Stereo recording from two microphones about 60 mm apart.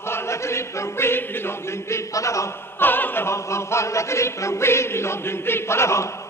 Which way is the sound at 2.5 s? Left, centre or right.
Left.